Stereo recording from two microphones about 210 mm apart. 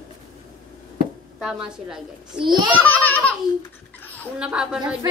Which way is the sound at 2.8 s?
5° left (ahead or behind).